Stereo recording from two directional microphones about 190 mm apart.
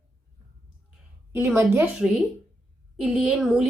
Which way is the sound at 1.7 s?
10° right (ahead or behind).